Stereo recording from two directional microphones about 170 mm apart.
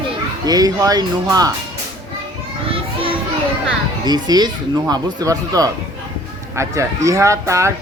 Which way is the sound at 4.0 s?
25° right (ahead or behind).